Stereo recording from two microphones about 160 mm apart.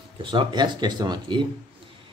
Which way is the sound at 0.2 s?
30° right (ahead or behind).